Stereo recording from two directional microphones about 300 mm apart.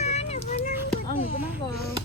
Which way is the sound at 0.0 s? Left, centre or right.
Left.